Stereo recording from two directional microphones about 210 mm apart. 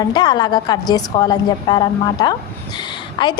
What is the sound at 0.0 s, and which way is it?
A woman's voice, 20° left (ahead or behind).